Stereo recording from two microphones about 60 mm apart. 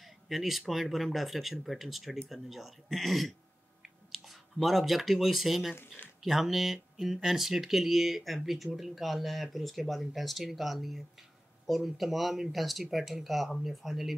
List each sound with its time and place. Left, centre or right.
0.0 s speech: centre
3.8 s a sound: centre
4.6 s speech: centre